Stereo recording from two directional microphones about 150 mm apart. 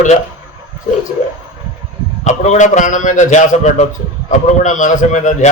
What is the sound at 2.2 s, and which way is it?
A man's voice, 50° left (ahead or behind).